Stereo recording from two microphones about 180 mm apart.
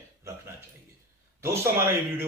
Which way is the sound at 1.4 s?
15° right (ahead or behind).